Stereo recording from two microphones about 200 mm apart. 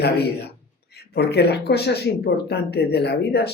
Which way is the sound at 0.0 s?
55° left (ahead or behind).